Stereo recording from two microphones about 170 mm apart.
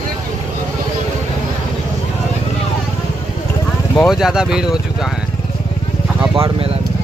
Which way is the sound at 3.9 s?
Centre (ahead or behind).